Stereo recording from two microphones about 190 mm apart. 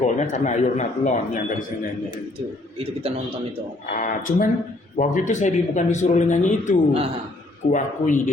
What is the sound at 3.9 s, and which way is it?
A man's voice, 45° left (ahead or behind).